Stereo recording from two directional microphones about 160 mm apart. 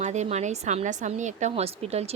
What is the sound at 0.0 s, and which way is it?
A woman's voice, 45° right (ahead or behind).